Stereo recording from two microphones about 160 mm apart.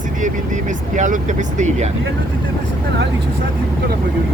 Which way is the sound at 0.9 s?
50° right (ahead or behind).